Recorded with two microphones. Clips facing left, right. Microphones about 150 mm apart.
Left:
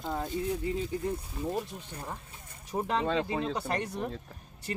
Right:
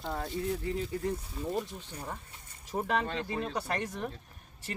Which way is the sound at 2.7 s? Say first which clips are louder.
Left 2 dB; 20° left (ahead or behind).